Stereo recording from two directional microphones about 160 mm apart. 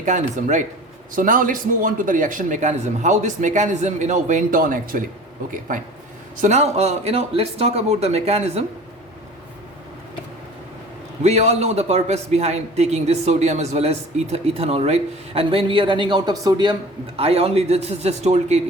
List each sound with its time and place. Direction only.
0.0 s a man's voice: 50° right (ahead or behind)
6.3 s a man's voice: 50° right (ahead or behind)
11.2 s a man's voice: 45° right (ahead or behind); by 16.7 s 25° right (ahead or behind)
17.2 s a man's voice: 40° right (ahead or behind)